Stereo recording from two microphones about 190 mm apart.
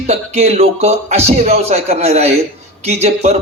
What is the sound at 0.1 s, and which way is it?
A man's voice, 35° right (ahead or behind).